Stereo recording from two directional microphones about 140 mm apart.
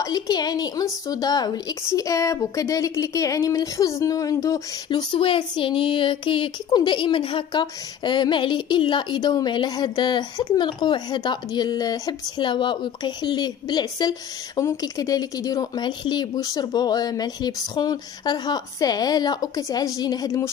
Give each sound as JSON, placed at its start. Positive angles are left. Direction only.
{"t": 0.0, "sound": "a woman's voice", "side_deg": 30}